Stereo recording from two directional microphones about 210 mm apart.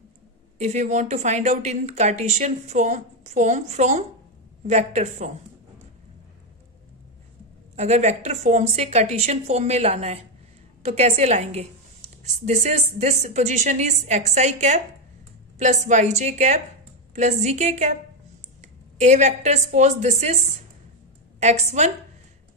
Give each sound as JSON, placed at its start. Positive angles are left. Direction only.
{"t": 0.6, "sound": "a woman's voice", "side_deg": -35}
{"t": 7.7, "sound": "a woman's voice", "side_deg": -30}
{"t": 18.9, "sound": "a woman's voice", "side_deg": -35}
{"t": 21.4, "sound": "a woman's voice", "side_deg": -30}